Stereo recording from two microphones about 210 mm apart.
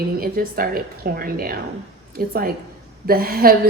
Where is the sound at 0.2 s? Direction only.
45° right (ahead or behind).